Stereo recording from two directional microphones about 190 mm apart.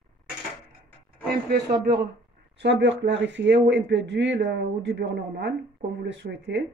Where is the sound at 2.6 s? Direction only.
65° right (ahead or behind).